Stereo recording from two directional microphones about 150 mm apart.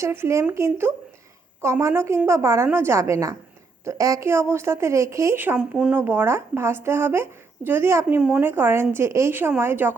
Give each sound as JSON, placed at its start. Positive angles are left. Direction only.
{"t": 0.0, "sound": "a woman's voice", "side_deg": -15}